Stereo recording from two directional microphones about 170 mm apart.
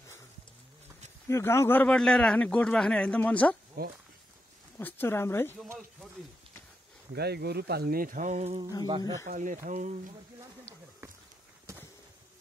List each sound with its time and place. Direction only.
1.2 s a man's voice: 15° left (ahead or behind)
3.8 s speech: 65° right (ahead or behind)
4.7 s a man's voice: 10° left (ahead or behind)
7.2 s speech: 70° right (ahead or behind); by 8.5 s 40° right (ahead or behind)
8.8 s speech: 25° right (ahead or behind)
9.3 s speech: 50° right (ahead or behind)
11.7 s a sound: 15° right (ahead or behind)